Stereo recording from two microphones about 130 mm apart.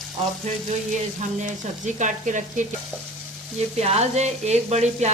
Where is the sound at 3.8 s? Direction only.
55° right (ahead or behind).